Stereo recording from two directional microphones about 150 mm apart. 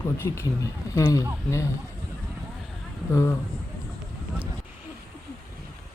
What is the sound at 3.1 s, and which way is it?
Speech, 15° left (ahead or behind).